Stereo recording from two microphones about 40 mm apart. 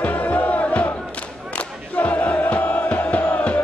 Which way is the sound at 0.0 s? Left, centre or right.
Left.